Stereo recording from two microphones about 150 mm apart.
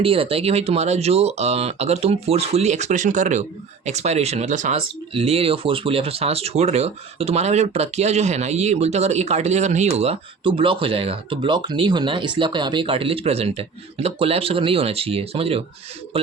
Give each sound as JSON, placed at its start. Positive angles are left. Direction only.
{"t": 0.0, "sound": "speech", "side_deg": -40}